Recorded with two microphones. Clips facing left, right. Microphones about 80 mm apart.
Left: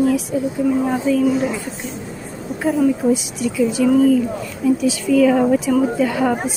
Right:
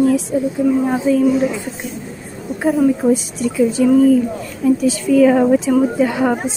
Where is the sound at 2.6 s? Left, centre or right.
Right.